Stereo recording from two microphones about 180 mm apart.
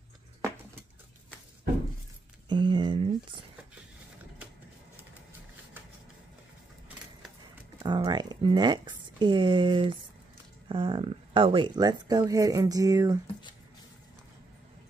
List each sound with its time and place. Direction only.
2.5 s speech: 25° right (ahead or behind)
7.8 s a sound: 25° right (ahead or behind)
10.7 s speech: 30° right (ahead or behind)